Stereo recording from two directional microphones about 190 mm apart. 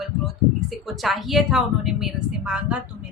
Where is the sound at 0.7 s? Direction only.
Centre (ahead or behind).